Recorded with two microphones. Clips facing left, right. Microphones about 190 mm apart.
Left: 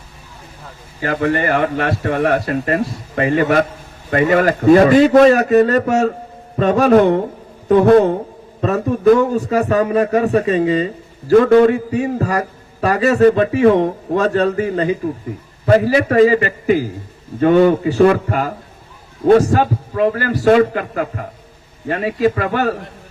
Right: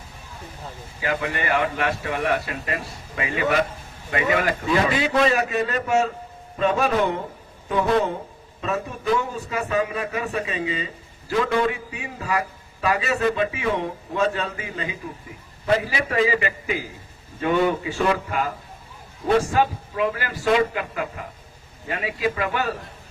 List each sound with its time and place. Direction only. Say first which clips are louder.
1.0 s a man's voice: left 8 dB; 45° left (ahead or behind)